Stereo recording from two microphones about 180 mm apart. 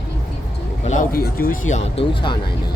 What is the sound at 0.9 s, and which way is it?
Speech, 50° left (ahead or behind).